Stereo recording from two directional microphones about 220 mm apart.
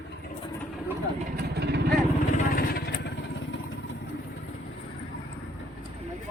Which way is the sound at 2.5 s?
45° left (ahead or behind).